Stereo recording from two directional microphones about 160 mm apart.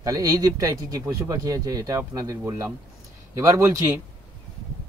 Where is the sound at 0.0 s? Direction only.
25° right (ahead or behind).